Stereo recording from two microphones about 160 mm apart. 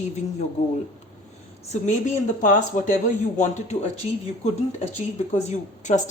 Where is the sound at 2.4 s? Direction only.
55° left (ahead or behind).